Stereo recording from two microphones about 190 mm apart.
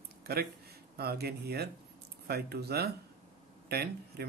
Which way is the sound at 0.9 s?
55° right (ahead or behind).